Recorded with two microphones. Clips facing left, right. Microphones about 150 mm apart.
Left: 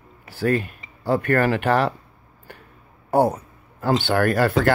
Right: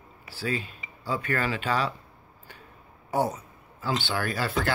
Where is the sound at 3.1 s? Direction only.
55° left (ahead or behind).